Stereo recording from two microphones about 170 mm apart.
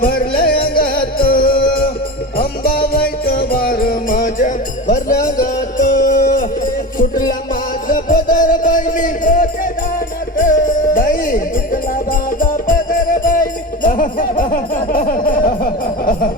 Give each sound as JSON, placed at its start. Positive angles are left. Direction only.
{"t": 0.0, "sound": "music", "side_deg": 60}
{"t": 7.9, "sound": "music", "side_deg": 55}